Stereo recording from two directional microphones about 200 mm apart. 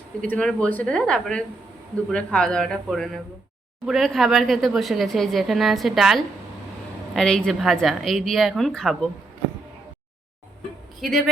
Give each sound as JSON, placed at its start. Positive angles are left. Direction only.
{"t": 0.2, "sound": "speech", "side_deg": 5}
{"t": 11.0, "sound": "speech", "side_deg": 0}